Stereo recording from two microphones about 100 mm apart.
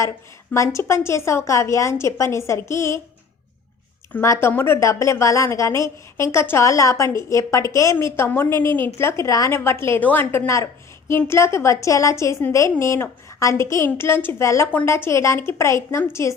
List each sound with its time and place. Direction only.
0.5 s a woman's voice: 30° left (ahead or behind)
4.2 s a woman's voice: 25° left (ahead or behind)